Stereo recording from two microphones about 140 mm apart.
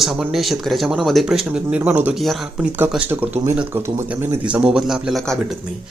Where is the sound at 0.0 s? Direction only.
5° right (ahead or behind).